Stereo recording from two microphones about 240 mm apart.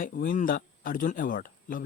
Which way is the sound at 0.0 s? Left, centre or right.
Left.